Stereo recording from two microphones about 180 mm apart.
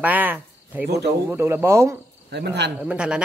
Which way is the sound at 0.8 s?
65° right (ahead or behind).